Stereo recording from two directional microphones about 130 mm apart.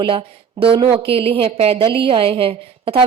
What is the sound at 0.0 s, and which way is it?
Speech, 45° right (ahead or behind).